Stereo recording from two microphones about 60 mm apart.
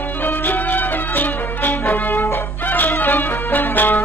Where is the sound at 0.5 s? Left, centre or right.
Left.